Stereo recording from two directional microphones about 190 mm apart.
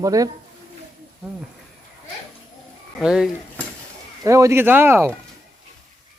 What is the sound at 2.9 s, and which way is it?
Speech, 5° right (ahead or behind).